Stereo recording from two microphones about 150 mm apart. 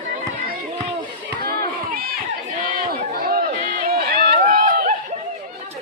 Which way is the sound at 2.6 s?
70° right (ahead or behind).